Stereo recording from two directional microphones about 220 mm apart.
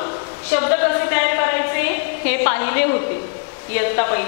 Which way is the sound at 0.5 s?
15° left (ahead or behind).